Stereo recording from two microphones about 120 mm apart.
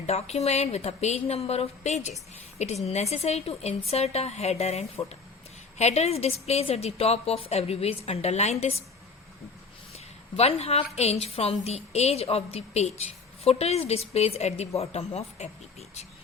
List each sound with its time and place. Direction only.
0.0 s a woman's voice: 60° left (ahead or behind)
9.9 s a woman's voice: 60° left (ahead or behind)